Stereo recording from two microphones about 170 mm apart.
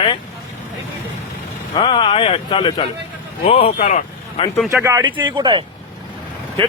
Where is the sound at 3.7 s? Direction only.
45° left (ahead or behind).